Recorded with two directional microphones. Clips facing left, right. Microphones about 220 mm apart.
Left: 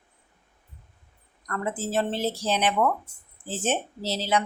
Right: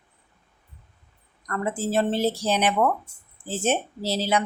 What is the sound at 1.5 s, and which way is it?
Speech, 10° right (ahead or behind).